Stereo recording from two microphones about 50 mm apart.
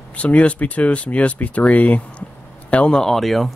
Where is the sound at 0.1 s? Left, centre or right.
Left.